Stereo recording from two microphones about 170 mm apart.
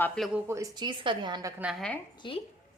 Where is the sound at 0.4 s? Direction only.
20° right (ahead or behind).